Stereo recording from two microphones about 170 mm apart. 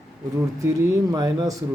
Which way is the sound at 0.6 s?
20° right (ahead or behind).